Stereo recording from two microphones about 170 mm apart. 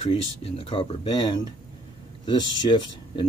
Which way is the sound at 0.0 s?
35° left (ahead or behind).